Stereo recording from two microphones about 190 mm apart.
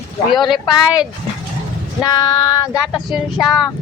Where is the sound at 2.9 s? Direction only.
Centre (ahead or behind).